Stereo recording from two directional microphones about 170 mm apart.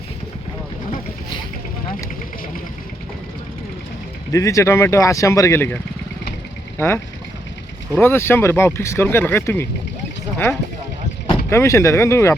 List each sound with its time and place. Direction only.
4.3 s speech: 20° left (ahead or behind)